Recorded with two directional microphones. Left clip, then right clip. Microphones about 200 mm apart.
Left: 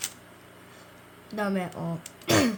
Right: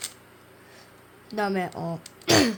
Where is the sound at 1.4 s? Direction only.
35° right (ahead or behind).